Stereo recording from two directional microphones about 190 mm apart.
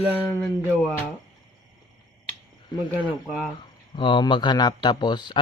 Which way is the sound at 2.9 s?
10° left (ahead or behind).